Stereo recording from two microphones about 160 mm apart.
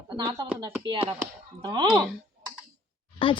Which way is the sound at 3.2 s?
30° left (ahead or behind).